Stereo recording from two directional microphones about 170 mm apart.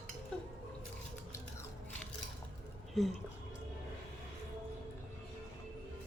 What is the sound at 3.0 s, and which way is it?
Speech, centre (ahead or behind).